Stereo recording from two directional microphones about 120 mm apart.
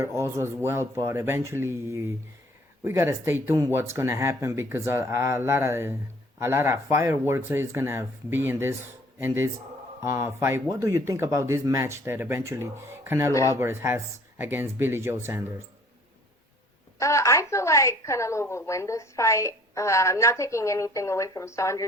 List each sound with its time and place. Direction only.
0.0 s speech: 25° right (ahead or behind)
13.3 s a woman's voice: 25° left (ahead or behind)
13.6 s speech: 20° right (ahead or behind)
17.0 s a woman's voice: 25° left (ahead or behind)